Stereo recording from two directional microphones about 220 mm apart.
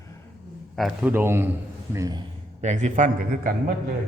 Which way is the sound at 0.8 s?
5° right (ahead or behind).